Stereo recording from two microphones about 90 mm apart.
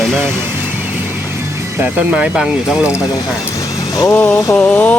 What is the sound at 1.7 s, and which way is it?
Speech, 15° right (ahead or behind).